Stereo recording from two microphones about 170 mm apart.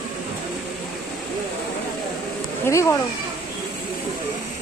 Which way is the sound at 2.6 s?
15° left (ahead or behind).